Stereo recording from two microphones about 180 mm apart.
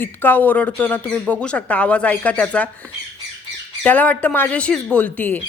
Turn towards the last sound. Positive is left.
turn(degrees=10)  # may be behind; listen again after turning